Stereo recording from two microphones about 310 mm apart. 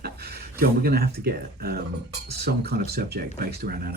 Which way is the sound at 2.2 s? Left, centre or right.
Right.